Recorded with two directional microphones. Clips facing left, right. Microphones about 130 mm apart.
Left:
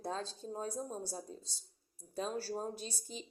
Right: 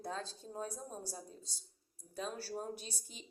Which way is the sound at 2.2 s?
30° left (ahead or behind).